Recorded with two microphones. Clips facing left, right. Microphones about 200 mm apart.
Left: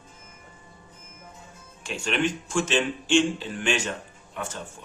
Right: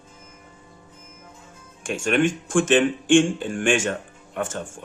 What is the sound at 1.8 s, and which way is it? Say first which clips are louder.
Speech: right 6 dB; 50° right (ahead or behind).